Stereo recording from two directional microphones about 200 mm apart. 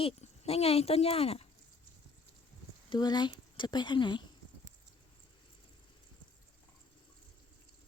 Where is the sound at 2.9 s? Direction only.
20° left (ahead or behind).